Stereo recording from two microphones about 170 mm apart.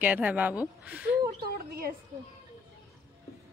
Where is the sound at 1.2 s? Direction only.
65° right (ahead or behind).